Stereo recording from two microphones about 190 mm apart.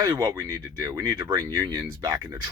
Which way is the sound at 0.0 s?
25° right (ahead or behind).